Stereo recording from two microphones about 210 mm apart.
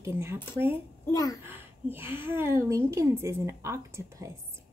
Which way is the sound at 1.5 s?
10° right (ahead or behind).